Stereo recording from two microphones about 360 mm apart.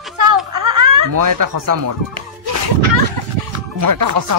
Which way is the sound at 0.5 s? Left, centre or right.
Right.